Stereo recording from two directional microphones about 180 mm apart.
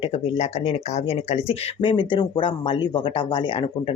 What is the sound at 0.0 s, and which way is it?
Speech, 35° left (ahead or behind).